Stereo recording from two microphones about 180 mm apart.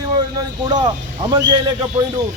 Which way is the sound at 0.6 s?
20° right (ahead or behind).